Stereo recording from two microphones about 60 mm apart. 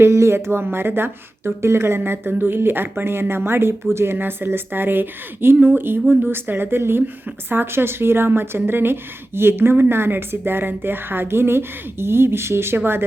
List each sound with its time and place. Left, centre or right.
0.0 s speech: right